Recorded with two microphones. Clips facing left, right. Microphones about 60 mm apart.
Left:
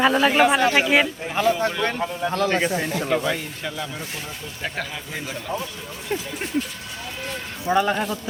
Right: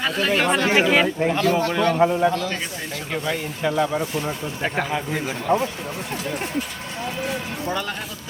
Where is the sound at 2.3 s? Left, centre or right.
Left.